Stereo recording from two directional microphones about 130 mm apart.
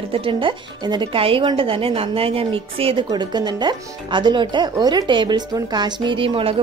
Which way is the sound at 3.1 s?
35° right (ahead or behind).